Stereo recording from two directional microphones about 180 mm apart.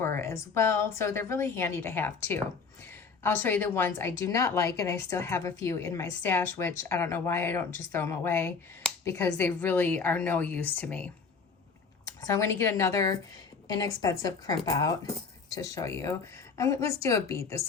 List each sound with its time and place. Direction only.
0.0 s a woman's voice: 15° left (ahead or behind)
12.0 s speech: 20° left (ahead or behind)